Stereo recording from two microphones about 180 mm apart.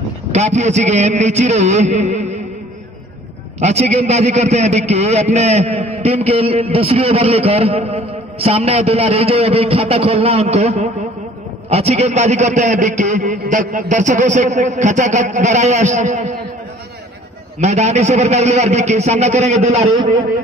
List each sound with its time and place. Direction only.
0.3 s a man's voice: 40° right (ahead or behind)
3.5 s a man's voice: 40° right (ahead or behind)
17.6 s a man's voice: 40° right (ahead or behind)